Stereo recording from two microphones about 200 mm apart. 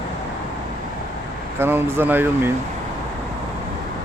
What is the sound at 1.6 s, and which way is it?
Speech, 10° right (ahead or behind).